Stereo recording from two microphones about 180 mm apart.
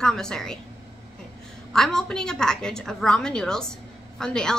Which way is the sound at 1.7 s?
5° left (ahead or behind).